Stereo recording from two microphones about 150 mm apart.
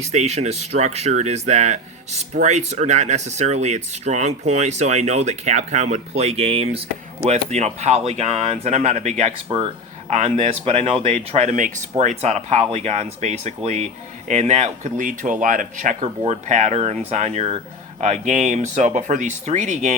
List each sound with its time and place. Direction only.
0.0 s speech: 45° right (ahead or behind)